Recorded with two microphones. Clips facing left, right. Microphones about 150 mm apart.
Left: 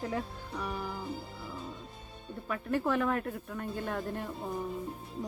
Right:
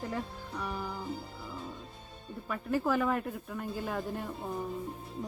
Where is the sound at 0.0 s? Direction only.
Centre (ahead or behind).